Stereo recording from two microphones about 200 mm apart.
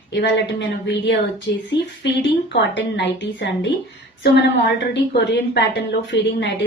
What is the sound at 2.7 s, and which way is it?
Speech, 65° left (ahead or behind).